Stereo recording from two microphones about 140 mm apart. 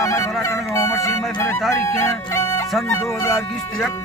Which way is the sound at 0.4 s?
20° left (ahead or behind).